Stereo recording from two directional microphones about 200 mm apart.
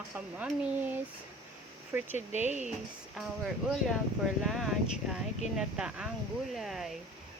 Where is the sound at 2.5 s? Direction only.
35° right (ahead or behind).